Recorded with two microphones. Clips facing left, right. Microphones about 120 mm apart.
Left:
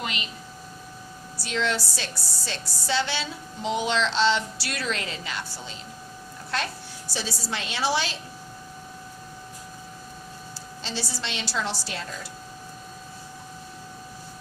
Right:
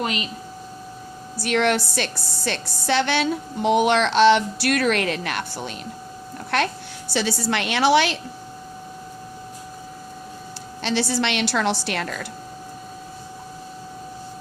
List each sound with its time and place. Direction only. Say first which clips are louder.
0.0 s a woman's voice: right 7 dB; 45° right (ahead or behind)
1.4 s a woman's voice: right 7 dB; 65° right (ahead or behind)
10.8 s a woman's voice: right 11 dB; 65° right (ahead or behind)